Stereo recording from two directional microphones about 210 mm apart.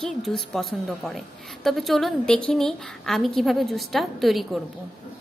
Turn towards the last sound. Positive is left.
turn(degrees=0)  # may be behind; listen again after turning